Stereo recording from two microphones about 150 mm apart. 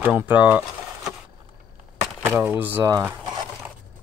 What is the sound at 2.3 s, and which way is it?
Speech, 10° right (ahead or behind).